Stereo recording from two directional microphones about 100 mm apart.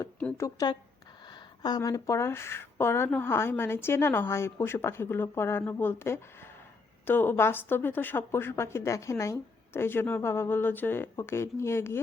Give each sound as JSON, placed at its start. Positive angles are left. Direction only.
{"t": 0.3, "sound": "a woman's voice", "side_deg": 35}